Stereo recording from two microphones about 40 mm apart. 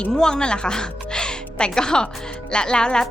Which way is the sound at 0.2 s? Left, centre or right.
Centre.